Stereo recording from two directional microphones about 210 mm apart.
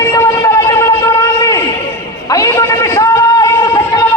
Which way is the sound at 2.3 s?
15° left (ahead or behind).